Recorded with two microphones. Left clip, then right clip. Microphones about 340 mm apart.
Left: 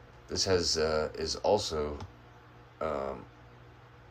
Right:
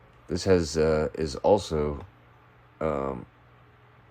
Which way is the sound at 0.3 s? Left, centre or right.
Centre.